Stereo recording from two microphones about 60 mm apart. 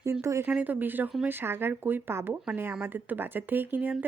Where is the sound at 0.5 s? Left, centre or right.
Right.